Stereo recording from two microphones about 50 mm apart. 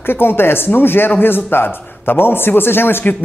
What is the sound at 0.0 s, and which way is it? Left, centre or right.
A woman's voice, left.